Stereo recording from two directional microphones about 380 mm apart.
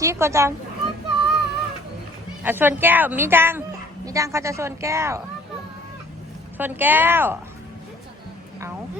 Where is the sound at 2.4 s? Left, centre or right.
Centre.